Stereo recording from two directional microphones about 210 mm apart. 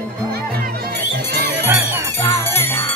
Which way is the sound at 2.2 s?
15° left (ahead or behind).